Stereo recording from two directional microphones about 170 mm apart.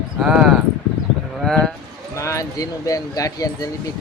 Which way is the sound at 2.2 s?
20° left (ahead or behind).